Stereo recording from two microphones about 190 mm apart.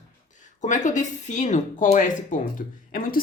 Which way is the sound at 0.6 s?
40° left (ahead or behind).